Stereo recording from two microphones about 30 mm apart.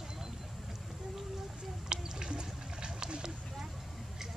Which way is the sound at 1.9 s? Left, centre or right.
Right.